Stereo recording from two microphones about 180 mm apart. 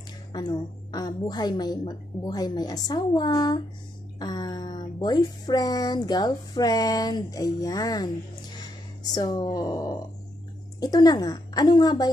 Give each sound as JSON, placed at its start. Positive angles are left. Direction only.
{"t": 0.3, "sound": "speech", "side_deg": 25}